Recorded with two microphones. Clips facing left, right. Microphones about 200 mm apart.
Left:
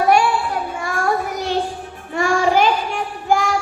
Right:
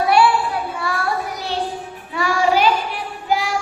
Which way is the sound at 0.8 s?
45° left (ahead or behind).